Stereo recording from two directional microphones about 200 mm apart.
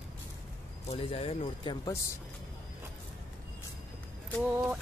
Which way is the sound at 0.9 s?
30° left (ahead or behind).